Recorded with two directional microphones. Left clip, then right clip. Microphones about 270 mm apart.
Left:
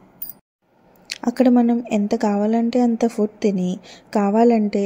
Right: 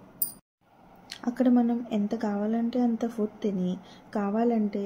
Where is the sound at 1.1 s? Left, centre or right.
Left.